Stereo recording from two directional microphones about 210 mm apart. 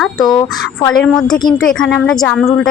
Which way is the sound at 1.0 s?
Centre (ahead or behind).